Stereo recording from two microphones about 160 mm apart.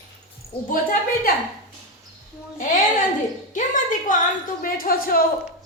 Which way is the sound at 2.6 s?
55° left (ahead or behind).